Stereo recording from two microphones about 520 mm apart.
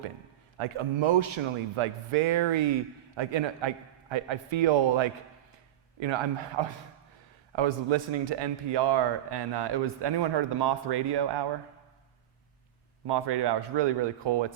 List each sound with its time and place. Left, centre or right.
0.6 s a man's voice: right
13.1 s a man's voice: right